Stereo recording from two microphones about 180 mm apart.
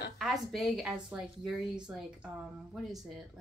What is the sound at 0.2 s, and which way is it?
A woman's voice, centre (ahead or behind).